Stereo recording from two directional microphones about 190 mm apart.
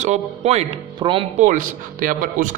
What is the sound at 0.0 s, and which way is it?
A man's voice, 35° right (ahead or behind).